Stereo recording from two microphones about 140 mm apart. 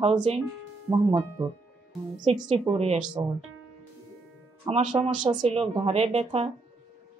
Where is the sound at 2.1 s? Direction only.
65° right (ahead or behind).